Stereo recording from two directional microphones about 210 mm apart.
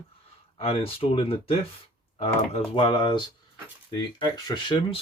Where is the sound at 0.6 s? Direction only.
25° left (ahead or behind).